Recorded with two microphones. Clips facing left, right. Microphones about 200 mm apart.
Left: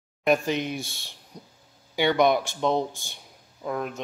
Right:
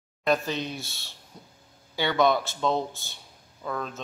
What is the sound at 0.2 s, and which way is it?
Speech, 15° left (ahead or behind).